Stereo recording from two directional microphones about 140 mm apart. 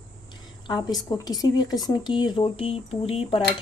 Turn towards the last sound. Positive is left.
turn(degrees=45)  # may be behind; listen again after turning